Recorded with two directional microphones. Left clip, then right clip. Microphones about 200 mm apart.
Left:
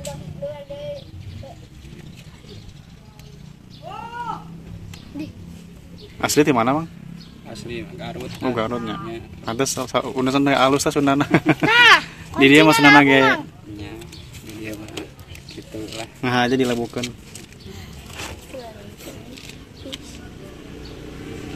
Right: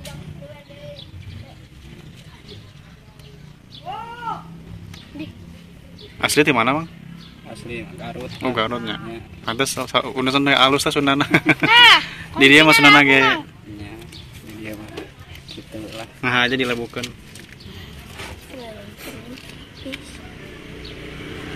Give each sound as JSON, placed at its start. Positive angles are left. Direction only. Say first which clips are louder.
{"t": 6.2, "sound": "speech", "louder": "right 1 dB", "side_deg": 20}
{"t": 8.4, "sound": "speech", "louder": "right 1 dB", "side_deg": 15}
{"t": 11.7, "sound": "speech", "louder": "right 2 dB", "side_deg": 60}
{"t": 12.1, "sound": "a man's voice", "louder": "right 2 dB", "side_deg": 15}
{"t": 16.2, "sound": "a sound", "louder": "right 1 dB", "side_deg": 30}